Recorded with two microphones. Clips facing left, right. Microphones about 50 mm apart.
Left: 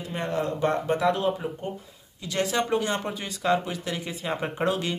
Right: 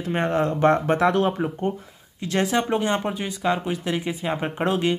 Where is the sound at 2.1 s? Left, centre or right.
Right.